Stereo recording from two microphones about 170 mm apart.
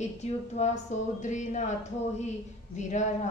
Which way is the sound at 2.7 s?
45° left (ahead or behind).